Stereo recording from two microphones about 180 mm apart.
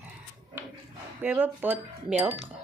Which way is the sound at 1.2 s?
10° right (ahead or behind).